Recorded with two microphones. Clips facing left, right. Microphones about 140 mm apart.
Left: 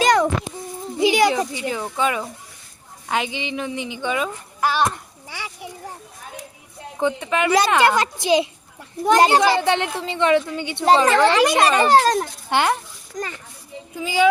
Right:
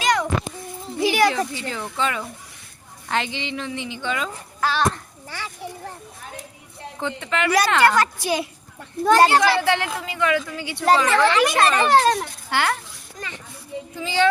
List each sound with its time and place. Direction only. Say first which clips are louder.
0.0 s a sound: left 5 dB; 35° left (ahead or behind)
0.9 s speech: left 2 dB; 20° left (ahead or behind)
5.3 s a sound: even; 15° left (ahead or behind)
7.0 s a woman's voice: left 4 dB; 15° left (ahead or behind); by 12.3 s 35° left (ahead or behind)
12.5 s a woman's voice: left 3 dB; 20° left (ahead or behind)
13.2 s a child's voice: left 7 dB; 40° left (ahead or behind)
13.9 s speech: left 2 dB; 10° left (ahead or behind)